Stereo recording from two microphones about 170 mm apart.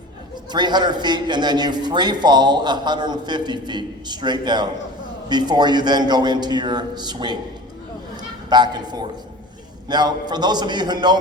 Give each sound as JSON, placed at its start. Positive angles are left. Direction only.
{"t": 0.5, "sound": "a man's voice", "side_deg": -25}
{"t": 8.4, "sound": "a man's voice", "side_deg": -25}